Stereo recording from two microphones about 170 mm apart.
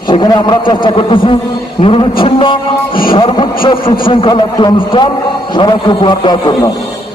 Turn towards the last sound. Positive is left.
turn(degrees=25)  # may be behind; listen again after turning